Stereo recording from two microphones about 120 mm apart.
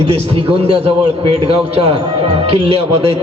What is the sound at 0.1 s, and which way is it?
A man's voice, 55° right (ahead or behind).